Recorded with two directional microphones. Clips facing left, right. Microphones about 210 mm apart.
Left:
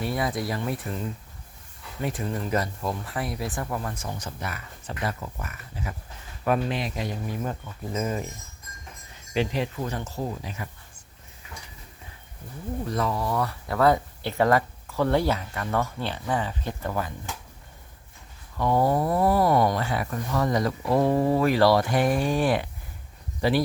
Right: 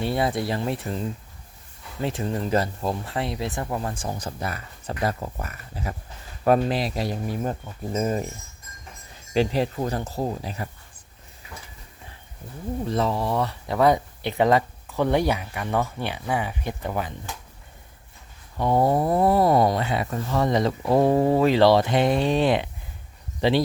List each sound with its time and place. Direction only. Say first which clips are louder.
0.0 s speech: right 3 dB; 30° right (ahead or behind)
9.3 s speech: right 4 dB; 35° right (ahead or behind)
12.9 s speech: right 3 dB; 25° right (ahead or behind)
18.5 s speech: right 2 dB; 20° right (ahead or behind)